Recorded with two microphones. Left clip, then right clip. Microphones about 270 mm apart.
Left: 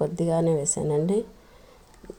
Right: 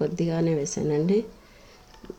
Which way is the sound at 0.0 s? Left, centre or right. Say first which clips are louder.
Left 2 dB; left.